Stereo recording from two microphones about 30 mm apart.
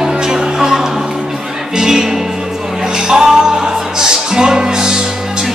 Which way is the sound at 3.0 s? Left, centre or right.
Right.